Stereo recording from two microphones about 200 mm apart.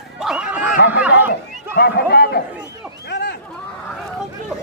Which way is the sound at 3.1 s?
55° left (ahead or behind).